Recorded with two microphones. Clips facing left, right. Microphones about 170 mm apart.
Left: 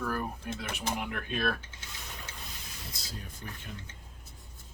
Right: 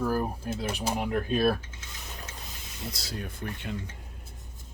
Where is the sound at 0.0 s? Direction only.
30° right (ahead or behind).